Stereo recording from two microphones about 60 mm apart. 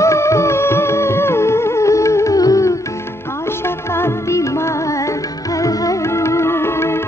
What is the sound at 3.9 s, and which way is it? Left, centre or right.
Music, left.